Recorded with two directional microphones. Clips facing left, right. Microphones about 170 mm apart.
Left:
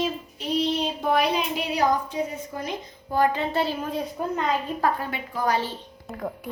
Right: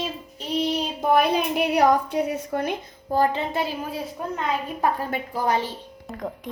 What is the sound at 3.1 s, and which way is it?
Speech, 35° right (ahead or behind).